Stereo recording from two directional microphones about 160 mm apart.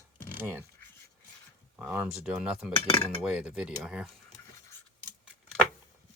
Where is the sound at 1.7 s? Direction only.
10° right (ahead or behind).